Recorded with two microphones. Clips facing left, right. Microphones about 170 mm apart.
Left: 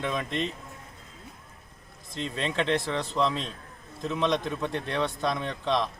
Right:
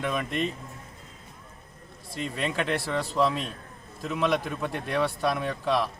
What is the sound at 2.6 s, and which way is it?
Speech, 25° left (ahead or behind).